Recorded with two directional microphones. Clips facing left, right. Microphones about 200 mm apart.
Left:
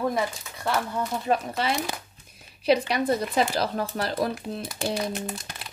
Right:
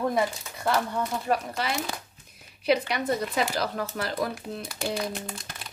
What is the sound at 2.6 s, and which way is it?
Speech, 30° left (ahead or behind).